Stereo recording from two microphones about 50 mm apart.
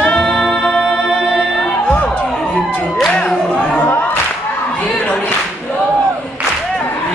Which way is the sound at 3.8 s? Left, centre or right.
Left.